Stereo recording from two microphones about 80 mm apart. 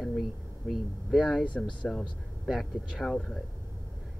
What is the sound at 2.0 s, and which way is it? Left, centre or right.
Speech, centre.